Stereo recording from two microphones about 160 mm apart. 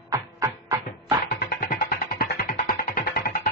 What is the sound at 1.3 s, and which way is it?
Music, 65° left (ahead or behind).